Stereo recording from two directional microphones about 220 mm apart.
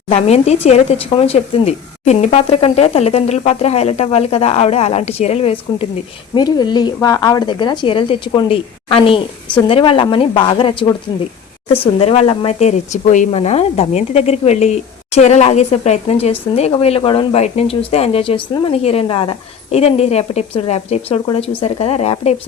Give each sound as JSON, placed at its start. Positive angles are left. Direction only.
{"t": 0.1, "sound": "speech", "side_deg": 30}
{"t": 11.9, "sound": "speech", "side_deg": 25}